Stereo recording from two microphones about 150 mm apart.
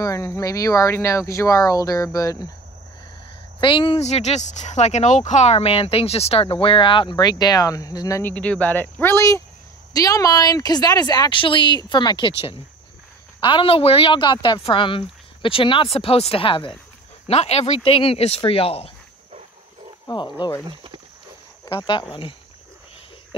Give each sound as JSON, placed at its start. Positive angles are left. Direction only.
{"t": 0.0, "sound": "speech", "side_deg": 20}
{"t": 3.6, "sound": "speech", "side_deg": 35}
{"t": 8.2, "sound": "speech", "side_deg": 10}
{"t": 20.1, "sound": "speech", "side_deg": 30}
{"t": 20.6, "sound": "speech", "side_deg": -35}
{"t": 21.6, "sound": "speech", "side_deg": 30}